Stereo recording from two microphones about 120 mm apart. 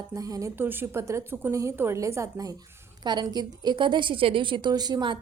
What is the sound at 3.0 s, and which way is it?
A woman's voice, 35° right (ahead or behind).